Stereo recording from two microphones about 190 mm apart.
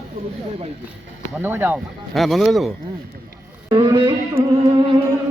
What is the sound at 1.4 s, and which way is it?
Speech, 10° right (ahead or behind).